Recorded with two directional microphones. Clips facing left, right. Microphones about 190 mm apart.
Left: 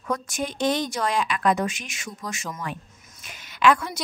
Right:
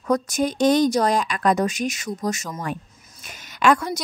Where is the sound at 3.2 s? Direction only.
45° right (ahead or behind).